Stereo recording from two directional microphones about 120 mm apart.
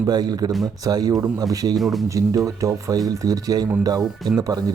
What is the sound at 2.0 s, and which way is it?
Speech, 25° right (ahead or behind).